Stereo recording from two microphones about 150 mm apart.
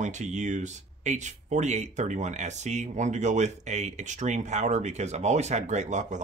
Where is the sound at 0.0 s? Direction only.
55° right (ahead or behind).